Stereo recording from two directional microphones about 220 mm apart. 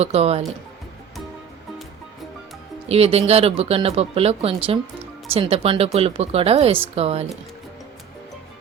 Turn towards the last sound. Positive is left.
turn(degrees=-25)  # may be behind; listen again after turning